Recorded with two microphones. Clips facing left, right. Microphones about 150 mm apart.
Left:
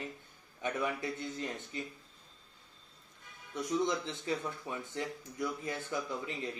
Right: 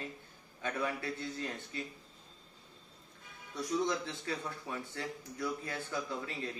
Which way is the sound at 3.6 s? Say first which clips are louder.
Left 1 dB; 20° left (ahead or behind).